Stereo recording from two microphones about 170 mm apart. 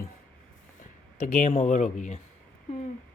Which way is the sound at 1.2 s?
45° left (ahead or behind).